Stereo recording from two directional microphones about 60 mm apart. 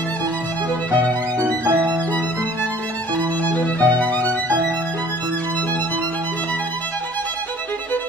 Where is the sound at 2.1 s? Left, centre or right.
Left.